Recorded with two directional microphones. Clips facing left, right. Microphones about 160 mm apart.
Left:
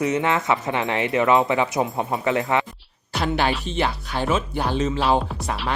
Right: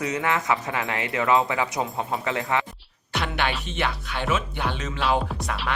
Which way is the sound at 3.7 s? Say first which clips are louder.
Left 4 dB; 35° left (ahead or behind).